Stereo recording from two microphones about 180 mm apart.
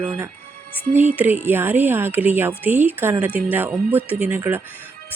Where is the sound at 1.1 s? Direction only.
10° right (ahead or behind).